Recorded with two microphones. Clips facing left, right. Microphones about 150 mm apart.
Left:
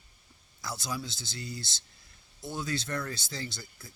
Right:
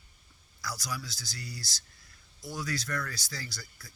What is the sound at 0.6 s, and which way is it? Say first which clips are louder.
Speech: left 2 dB; 25° left (ahead or behind).